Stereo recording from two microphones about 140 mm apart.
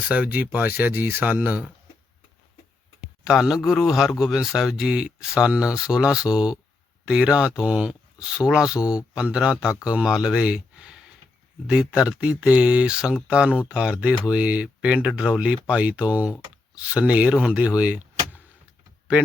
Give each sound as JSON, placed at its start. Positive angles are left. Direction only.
{"t": 0.1, "sound": "speech", "side_deg": -10}
{"t": 3.2, "sound": "speech", "side_deg": -5}